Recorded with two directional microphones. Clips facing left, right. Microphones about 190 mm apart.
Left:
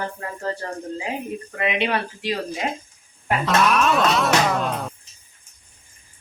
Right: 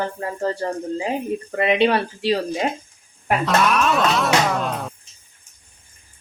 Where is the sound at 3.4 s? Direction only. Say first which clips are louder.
Even; centre (ahead or behind).